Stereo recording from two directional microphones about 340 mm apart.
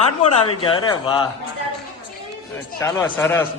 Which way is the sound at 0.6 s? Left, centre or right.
Centre.